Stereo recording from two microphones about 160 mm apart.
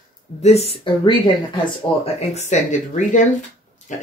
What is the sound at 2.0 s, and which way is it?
Speech, 45° left (ahead or behind).